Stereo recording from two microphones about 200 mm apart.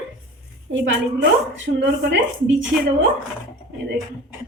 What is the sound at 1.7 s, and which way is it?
Speech, 55° right (ahead or behind).